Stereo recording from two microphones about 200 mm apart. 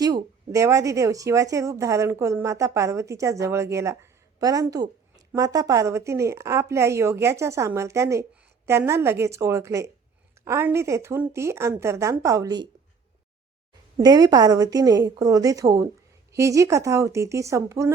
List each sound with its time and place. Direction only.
0.0 s speech: 15° right (ahead or behind)
13.9 s speech: 20° right (ahead or behind)